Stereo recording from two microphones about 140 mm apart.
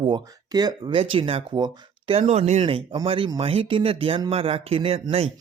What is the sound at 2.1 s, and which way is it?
Speech, 50° right (ahead or behind).